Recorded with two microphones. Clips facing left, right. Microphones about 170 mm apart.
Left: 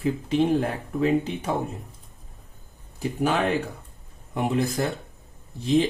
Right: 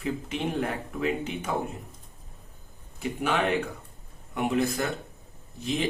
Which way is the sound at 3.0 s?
40° left (ahead or behind).